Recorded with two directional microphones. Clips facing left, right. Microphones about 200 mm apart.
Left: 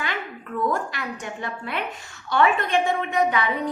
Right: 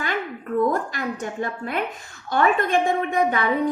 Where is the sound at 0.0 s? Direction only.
45° right (ahead or behind).